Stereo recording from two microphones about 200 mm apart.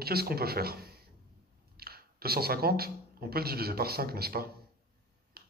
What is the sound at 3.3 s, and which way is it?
Speech, 50° right (ahead or behind).